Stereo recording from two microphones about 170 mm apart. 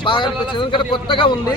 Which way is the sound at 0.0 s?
30° left (ahead or behind).